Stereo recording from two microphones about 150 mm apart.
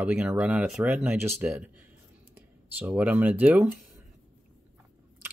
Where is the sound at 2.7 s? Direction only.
10° right (ahead or behind).